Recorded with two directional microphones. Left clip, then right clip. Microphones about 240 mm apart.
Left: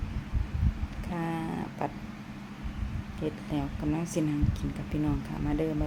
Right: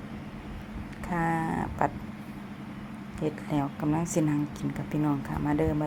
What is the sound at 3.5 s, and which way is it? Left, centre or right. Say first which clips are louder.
Speech: right 4 dB; centre.